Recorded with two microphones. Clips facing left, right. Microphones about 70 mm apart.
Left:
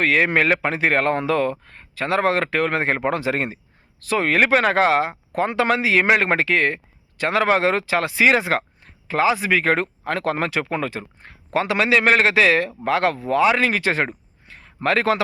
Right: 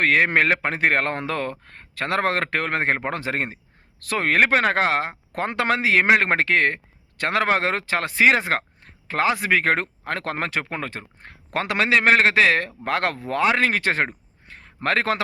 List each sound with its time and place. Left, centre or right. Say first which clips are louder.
0.0 s speech: left 1 dB; right
4.0 s speech: left 1 dB; right
11.2 s speech: left 4 dB; right
14.4 s a sound: left 3 dB; right